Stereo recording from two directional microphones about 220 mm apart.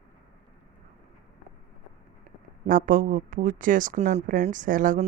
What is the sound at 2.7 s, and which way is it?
Speech, 35° right (ahead or behind).